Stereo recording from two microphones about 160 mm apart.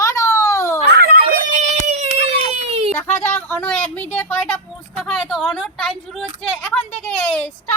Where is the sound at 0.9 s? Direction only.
70° right (ahead or behind); by 2.9 s 40° right (ahead or behind).